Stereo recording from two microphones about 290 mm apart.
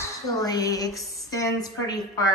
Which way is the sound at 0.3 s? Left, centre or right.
Centre.